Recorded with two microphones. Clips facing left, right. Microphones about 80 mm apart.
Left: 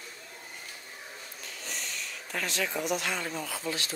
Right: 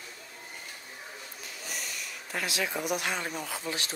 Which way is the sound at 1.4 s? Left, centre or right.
Centre.